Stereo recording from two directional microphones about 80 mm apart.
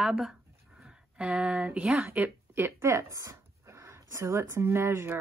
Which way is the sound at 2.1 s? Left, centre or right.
Right.